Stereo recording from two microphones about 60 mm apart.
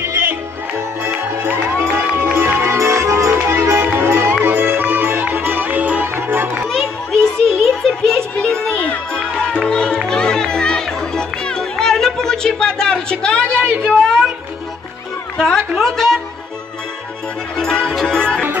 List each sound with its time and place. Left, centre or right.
0.0 s music: right
2.3 s music: right
6.1 s music: right
6.7 s music: centre
8.7 s music: left
9.1 s music: centre
9.7 s run: centre
10.0 s music: centre
13.8 s a sound: centre
15.3 s a sound: centre
15.8 s music: centre
17.6 s music: centre